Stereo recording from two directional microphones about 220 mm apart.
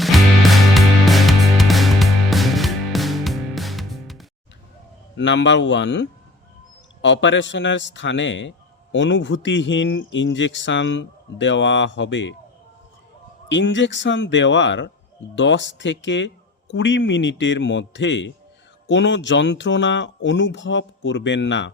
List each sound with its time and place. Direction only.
0.0 s music: centre (ahead or behind)
5.1 s a man's voice: 55° left (ahead or behind)
13.5 s a man's voice: 55° left (ahead or behind)